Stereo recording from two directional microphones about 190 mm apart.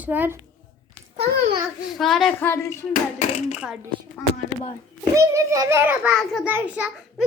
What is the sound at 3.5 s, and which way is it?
Speech, 5° right (ahead or behind).